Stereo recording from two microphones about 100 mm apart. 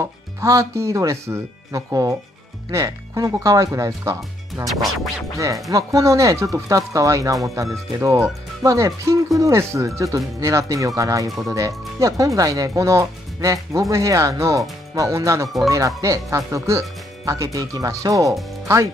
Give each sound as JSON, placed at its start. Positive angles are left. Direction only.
{"t": 0.0, "sound": "speech", "side_deg": -30}
{"t": 4.6, "sound": "music", "side_deg": 0}
{"t": 5.4, "sound": "speech", "side_deg": -35}